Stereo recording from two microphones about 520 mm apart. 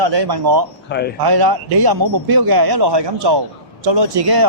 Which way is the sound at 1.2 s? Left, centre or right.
Right.